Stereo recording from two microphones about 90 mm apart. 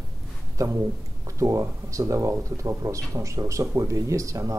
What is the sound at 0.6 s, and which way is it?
Speech, 40° right (ahead or behind).